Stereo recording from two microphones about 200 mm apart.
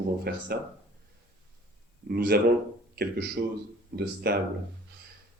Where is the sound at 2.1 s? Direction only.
50° right (ahead or behind).